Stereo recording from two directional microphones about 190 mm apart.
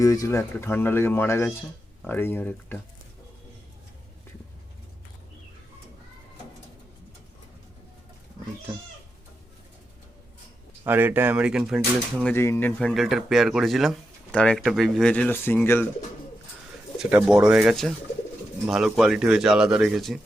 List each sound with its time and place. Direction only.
0.0 s speech: 20° left (ahead or behind)
10.8 s speech: 10° right (ahead or behind)
12.2 s speech: 10° left (ahead or behind)
17.0 s speech: 5° right (ahead or behind)